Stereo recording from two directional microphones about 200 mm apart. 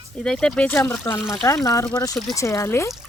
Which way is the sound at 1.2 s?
5° right (ahead or behind).